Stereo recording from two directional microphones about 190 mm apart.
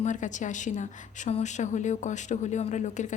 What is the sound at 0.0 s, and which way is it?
A woman's voice, 40° left (ahead or behind).